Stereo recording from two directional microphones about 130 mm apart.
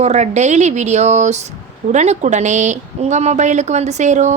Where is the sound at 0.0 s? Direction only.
60° right (ahead or behind).